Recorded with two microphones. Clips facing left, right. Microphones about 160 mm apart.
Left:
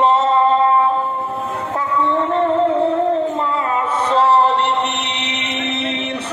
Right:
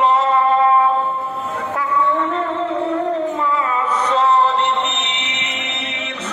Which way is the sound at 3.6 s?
30° left (ahead or behind).